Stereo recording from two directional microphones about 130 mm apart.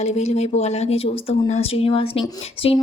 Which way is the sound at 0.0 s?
55° left (ahead or behind).